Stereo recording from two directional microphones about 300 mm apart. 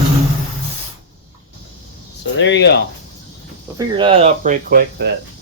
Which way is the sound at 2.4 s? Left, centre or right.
Left.